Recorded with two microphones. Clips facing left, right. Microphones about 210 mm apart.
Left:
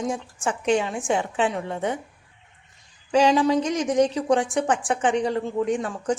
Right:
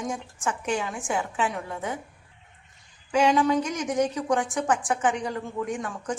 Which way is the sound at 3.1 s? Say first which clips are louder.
Left 3 dB; 30° left (ahead or behind).